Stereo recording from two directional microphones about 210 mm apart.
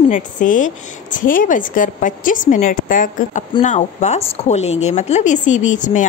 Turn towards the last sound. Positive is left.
turn(degrees=35)  # may be behind; listen again after turning